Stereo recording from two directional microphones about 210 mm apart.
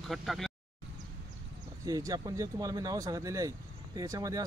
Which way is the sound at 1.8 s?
15° right (ahead or behind).